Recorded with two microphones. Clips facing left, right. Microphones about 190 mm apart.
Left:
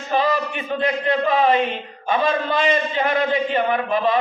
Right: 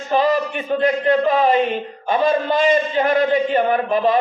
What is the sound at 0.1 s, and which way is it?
A man's voice, 40° right (ahead or behind).